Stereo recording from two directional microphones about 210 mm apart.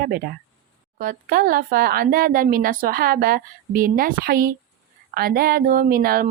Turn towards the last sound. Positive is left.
turn(degrees=-45)  # may be behind; listen again after turning